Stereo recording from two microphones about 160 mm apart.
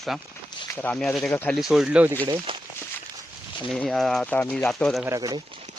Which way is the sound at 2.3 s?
30° right (ahead or behind).